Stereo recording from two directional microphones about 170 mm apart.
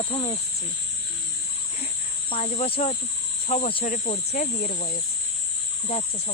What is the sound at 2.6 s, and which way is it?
Speech, 35° left (ahead or behind).